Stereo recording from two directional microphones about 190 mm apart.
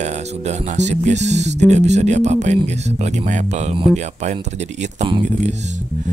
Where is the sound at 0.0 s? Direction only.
35° right (ahead or behind).